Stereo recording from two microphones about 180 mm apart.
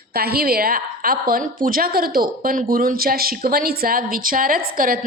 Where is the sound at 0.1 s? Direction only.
60° right (ahead or behind).